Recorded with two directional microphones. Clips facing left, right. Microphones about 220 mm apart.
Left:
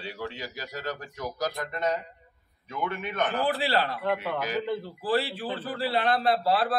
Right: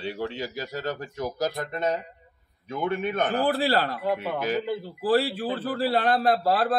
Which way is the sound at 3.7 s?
45° right (ahead or behind).